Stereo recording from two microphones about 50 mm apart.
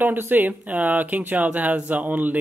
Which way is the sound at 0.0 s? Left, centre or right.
Right.